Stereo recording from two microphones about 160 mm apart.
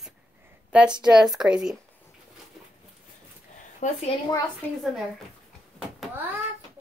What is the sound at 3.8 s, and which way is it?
Speech, 50° left (ahead or behind).